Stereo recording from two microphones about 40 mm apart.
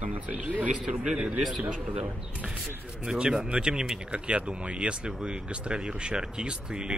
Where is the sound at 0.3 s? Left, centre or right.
Right.